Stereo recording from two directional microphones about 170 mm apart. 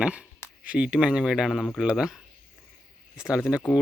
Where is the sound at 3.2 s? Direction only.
5° right (ahead or behind).